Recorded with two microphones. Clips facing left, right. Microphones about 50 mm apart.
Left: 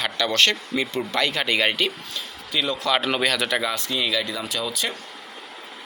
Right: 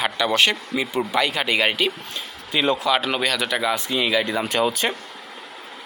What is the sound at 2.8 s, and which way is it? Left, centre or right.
Speech, centre.